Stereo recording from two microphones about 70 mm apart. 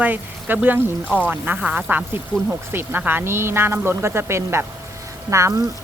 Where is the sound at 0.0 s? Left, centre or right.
Right.